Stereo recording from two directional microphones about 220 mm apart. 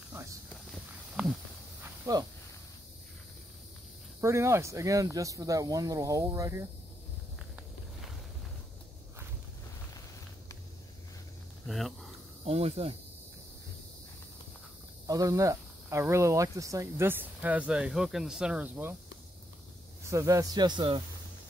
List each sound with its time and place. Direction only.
1.2 s a sound: 5° right (ahead or behind)
1.8 s snake: 15° right (ahead or behind)
4.2 s speech: 10° right (ahead or behind)
11.6 s a sound: centre (ahead or behind)
12.4 s speech: 25° right (ahead or behind)
15.0 s speech: 15° right (ahead or behind)
20.1 s speech: 15° right (ahead or behind)